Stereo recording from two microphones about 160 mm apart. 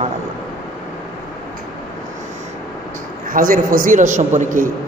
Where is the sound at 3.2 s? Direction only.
60° right (ahead or behind).